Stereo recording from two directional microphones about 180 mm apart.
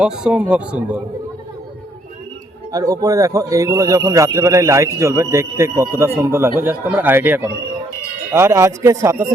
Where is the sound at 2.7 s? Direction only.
20° right (ahead or behind).